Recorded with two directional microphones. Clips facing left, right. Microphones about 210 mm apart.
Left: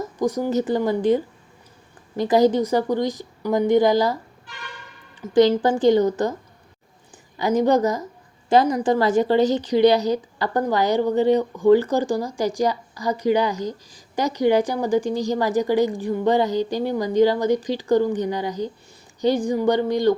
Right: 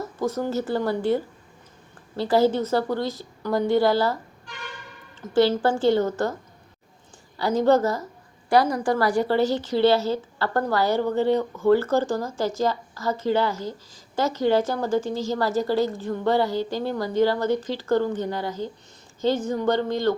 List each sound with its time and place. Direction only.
0.0 s a woman's voice: 15° left (ahead or behind)
5.2 s a woman's voice: 15° left (ahead or behind)
7.3 s a woman's voice: 15° left (ahead or behind)